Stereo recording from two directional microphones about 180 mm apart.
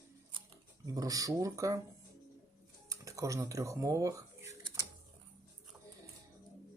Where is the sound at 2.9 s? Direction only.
15° right (ahead or behind).